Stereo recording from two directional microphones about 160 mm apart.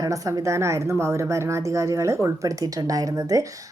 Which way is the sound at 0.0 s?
20° right (ahead or behind).